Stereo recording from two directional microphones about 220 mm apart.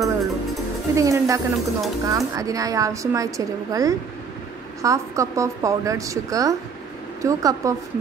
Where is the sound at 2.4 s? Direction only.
15° right (ahead or behind).